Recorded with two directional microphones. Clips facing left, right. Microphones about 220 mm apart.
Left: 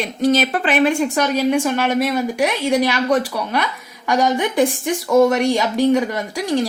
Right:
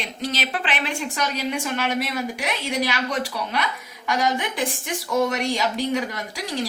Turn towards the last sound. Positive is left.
turn(degrees=50)  # may be behind; listen again after turning